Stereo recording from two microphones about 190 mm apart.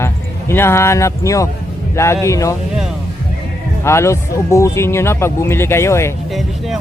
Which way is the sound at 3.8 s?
15° left (ahead or behind).